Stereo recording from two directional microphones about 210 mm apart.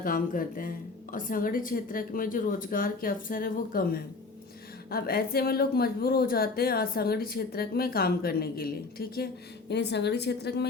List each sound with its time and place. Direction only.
0.0 s a woman's voice: 40° left (ahead or behind)